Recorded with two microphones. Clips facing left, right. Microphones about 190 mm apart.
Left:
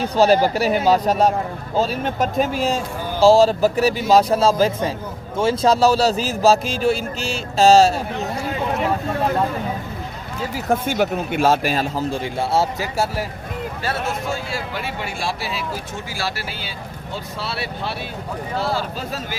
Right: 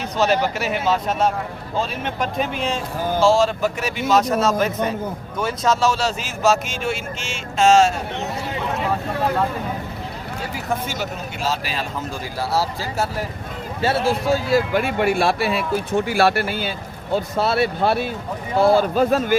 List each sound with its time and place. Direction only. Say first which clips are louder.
0.0 s a man's voice: left 4 dB; 35° left (ahead or behind)
10.7 s speech: left 7 dB; 55° left (ahead or behind)
12.1 s speech: left 1 dB; 25° left (ahead or behind)
13.8 s speech: right 7 dB; 30° right (ahead or behind); by 19.4 s 55° right (ahead or behind)